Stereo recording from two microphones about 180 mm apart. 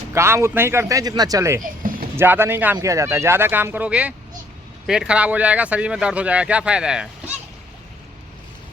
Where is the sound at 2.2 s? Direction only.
15° right (ahead or behind).